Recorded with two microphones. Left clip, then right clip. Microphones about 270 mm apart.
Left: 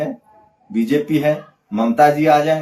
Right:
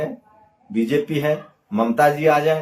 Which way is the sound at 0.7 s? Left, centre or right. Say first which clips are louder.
Left 3 dB; centre.